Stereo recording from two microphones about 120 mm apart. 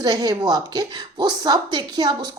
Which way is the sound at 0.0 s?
30° right (ahead or behind).